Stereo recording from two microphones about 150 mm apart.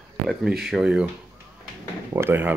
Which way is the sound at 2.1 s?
15° right (ahead or behind).